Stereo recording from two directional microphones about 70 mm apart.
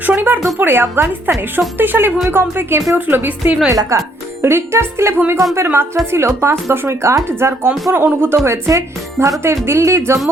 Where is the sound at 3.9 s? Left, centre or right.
Right.